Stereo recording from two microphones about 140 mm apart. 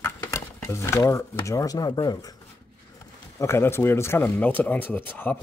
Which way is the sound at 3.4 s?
20° left (ahead or behind).